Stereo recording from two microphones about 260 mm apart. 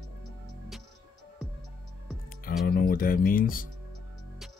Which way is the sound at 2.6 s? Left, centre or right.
Left.